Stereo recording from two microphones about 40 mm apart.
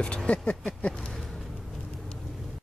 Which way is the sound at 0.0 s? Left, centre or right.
Left.